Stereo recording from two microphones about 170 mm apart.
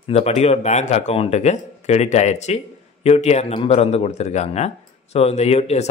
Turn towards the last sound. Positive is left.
turn(degrees=40)  # may be behind; listen again after turning